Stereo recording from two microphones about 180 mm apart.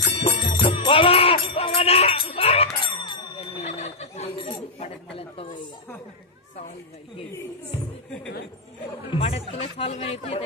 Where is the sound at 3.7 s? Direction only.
35° left (ahead or behind).